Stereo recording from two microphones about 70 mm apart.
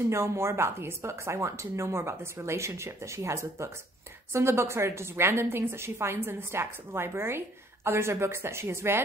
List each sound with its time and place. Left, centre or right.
0.1 s a woman's voice: right